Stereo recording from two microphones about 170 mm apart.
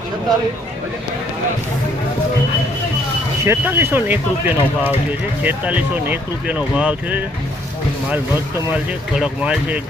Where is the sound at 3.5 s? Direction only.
15° right (ahead or behind).